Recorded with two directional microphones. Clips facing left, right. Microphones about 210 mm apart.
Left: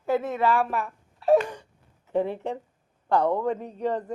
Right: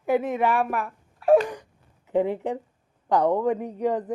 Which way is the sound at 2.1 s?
15° right (ahead or behind).